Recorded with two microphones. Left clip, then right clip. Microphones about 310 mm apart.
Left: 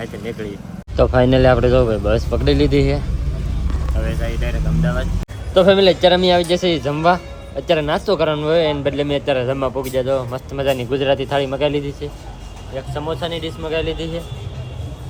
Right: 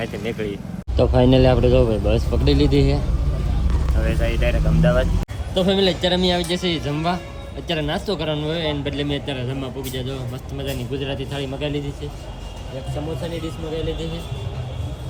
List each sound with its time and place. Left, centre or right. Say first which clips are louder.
0.0 s speech: right 1 dB; centre